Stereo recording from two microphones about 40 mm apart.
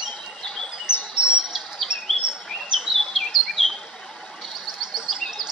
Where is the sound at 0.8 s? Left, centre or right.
Right.